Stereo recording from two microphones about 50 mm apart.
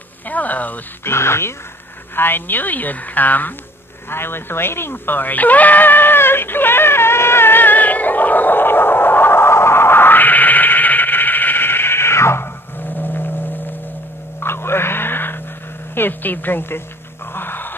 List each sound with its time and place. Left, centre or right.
0.3 s a woman's voice: left
1.0 s speech: left
2.1 s a woman's voice: left
4.1 s a sound: left
12.9 s vehicle: left
14.4 s a sound: left
15.9 s speech: left
17.3 s music: left